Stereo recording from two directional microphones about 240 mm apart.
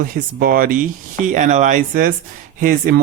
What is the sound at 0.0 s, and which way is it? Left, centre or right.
Speech, right.